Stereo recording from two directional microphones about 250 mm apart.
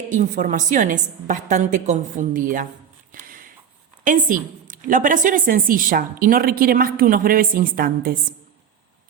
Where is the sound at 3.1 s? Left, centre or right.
Right.